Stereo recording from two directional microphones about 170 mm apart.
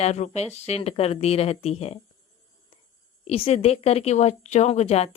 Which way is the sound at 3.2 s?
35° left (ahead or behind).